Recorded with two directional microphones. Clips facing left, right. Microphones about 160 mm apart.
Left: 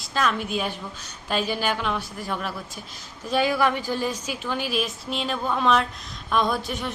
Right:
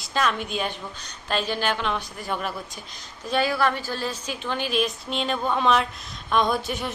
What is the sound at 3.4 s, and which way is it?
A woman's voice, 15° left (ahead or behind).